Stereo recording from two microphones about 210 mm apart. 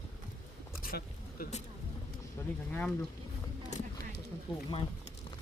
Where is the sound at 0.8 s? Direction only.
45° left (ahead or behind).